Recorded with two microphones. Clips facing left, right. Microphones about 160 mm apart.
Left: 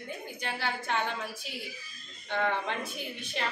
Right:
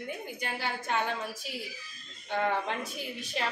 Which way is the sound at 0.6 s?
10° right (ahead or behind).